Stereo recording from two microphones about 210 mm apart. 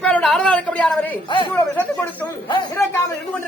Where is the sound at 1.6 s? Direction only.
10° left (ahead or behind).